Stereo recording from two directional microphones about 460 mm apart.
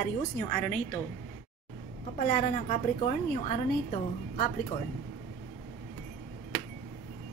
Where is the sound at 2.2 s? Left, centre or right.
Centre.